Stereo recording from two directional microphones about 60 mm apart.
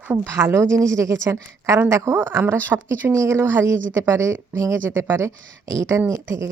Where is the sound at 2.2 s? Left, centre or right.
Right.